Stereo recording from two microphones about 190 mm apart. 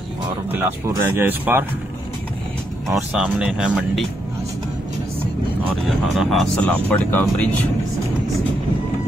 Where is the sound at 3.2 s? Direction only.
5° right (ahead or behind).